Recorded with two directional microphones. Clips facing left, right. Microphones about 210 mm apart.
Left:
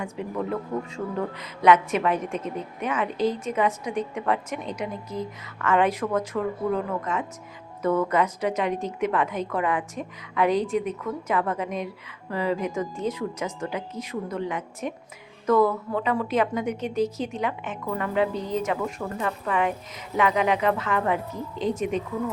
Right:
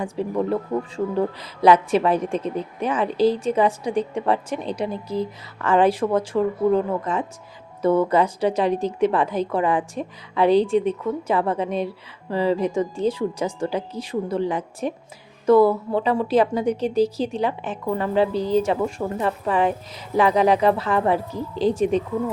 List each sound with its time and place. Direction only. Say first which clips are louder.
0.0 s speech: right 6 dB; 30° right (ahead or behind)